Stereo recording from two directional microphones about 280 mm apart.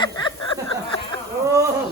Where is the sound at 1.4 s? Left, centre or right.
Centre.